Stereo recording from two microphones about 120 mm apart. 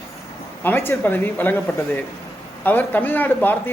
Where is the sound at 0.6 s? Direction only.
15° left (ahead or behind).